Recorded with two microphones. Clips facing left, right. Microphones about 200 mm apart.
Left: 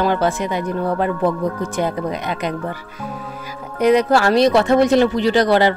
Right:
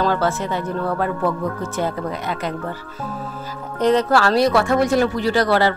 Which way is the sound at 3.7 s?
10° left (ahead or behind).